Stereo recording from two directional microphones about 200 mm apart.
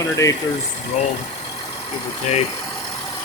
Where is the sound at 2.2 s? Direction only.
35° left (ahead or behind).